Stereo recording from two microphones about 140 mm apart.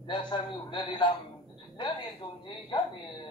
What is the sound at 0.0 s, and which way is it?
A man's voice, 35° left (ahead or behind).